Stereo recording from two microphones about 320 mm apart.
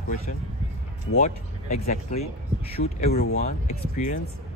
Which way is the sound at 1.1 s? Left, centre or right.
Left.